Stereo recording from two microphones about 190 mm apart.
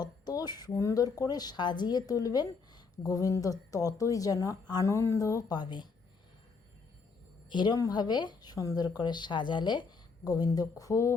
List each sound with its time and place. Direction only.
0.0 s a woman's voice: 20° left (ahead or behind)
7.5 s a woman's voice: 20° left (ahead or behind)